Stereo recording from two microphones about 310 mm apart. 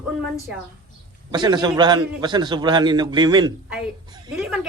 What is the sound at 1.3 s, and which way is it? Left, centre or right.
A man's voice, centre.